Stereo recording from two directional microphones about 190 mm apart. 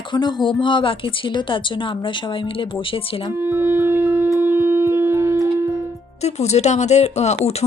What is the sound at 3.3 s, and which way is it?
Shofar, 10° right (ahead or behind).